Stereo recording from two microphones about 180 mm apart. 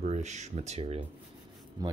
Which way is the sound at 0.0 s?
40° right (ahead or behind).